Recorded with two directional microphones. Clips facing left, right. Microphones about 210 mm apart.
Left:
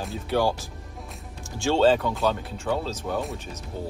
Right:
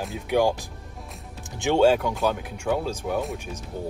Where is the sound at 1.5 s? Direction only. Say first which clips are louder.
Right 1 dB; 15° right (ahead or behind).